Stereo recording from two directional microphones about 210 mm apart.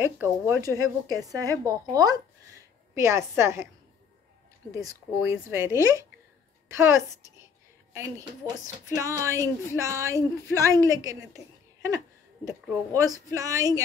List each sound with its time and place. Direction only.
0.0 s a woman's voice: 10° right (ahead or behind)
5.5 s a woman's voice: 15° right (ahead or behind)